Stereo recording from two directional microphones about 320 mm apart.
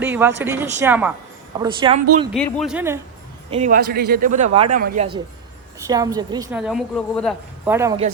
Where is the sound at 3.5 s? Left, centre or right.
Right.